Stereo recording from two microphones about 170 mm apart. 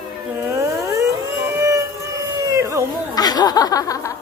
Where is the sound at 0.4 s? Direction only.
15° right (ahead or behind).